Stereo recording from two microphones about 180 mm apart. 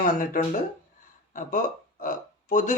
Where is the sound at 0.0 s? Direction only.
50° left (ahead or behind).